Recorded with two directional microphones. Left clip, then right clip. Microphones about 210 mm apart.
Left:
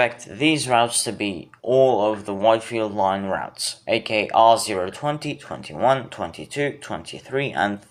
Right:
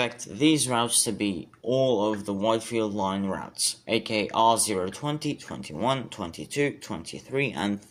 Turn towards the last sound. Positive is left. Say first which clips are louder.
# left 6 dB
turn(degrees=-45)  # may be behind; listen again after turning